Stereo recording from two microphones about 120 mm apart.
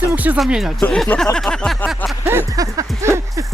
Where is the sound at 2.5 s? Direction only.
30° right (ahead or behind).